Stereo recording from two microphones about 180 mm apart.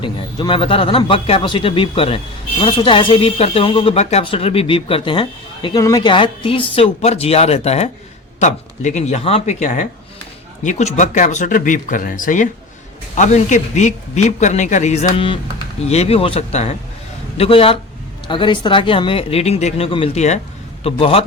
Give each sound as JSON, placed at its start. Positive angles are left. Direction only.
{"t": 0.0, "sound": "a man's voice", "side_deg": 25}